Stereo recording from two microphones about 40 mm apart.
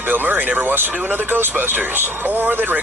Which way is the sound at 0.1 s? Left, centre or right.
Right.